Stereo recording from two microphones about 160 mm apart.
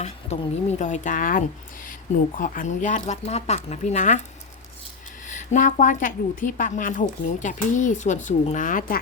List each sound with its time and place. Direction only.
0.0 s a woman's voice: 45° left (ahead or behind)
5.3 s a woman's voice: 50° left (ahead or behind)